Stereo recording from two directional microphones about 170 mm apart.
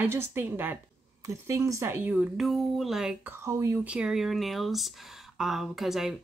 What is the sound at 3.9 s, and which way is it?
Speech, 5° right (ahead or behind).